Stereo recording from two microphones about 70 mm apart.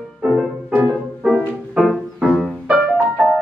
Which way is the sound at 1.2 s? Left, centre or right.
Centre.